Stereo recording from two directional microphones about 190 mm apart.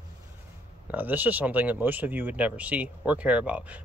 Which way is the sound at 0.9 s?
10° right (ahead or behind).